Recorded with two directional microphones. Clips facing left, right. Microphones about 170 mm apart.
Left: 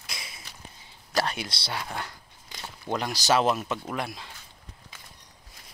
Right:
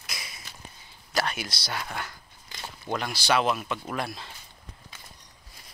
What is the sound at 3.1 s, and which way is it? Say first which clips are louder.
Speech: left 2 dB; 40° left (ahead or behind).